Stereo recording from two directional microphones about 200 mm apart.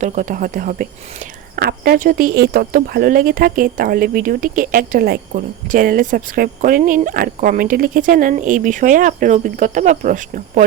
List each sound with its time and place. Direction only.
0.0 s speech: 40° right (ahead or behind)